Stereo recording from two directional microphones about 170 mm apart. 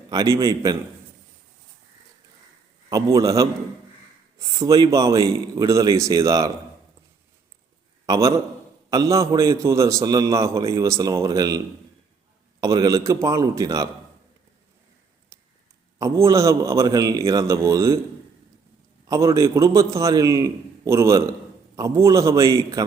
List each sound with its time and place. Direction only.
0.1 s a man's voice: 20° right (ahead or behind)
2.9 s a man's voice: 20° right (ahead or behind)
8.0 s a man's voice: 20° right (ahead or behind)
16.0 s a man's voice: 15° right (ahead or behind)
19.0 s a man's voice: 20° right (ahead or behind)